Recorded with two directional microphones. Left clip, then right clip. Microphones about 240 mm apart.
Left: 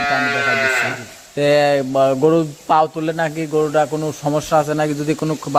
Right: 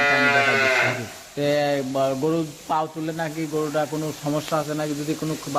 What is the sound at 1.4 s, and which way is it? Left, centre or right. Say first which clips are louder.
Speech: left 8 dB; left.